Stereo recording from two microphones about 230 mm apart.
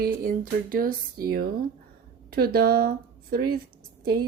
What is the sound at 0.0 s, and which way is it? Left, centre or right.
Speech, right.